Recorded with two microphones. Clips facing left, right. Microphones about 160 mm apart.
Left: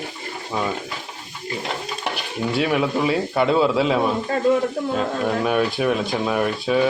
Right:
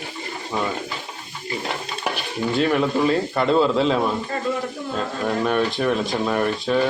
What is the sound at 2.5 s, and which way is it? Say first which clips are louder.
Speech: right 1 dB; 5° left (ahead or behind).